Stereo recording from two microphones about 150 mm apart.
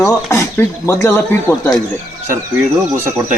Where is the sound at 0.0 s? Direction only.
20° left (ahead or behind).